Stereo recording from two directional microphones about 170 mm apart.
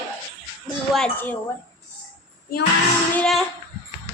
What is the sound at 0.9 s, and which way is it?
Speech, 10° left (ahead or behind).